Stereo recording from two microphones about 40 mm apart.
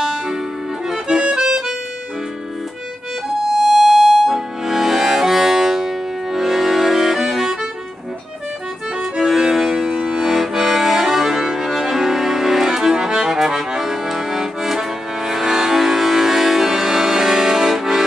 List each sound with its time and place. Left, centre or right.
0.0 s music: centre
0.8 s accordion: centre
3.4 s music: centre
9.0 s accordion: centre